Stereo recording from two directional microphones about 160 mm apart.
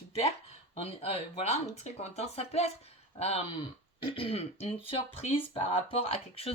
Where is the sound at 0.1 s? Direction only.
40° left (ahead or behind).